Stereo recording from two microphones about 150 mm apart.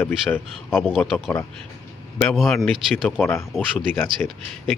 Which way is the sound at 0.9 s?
Centre (ahead or behind).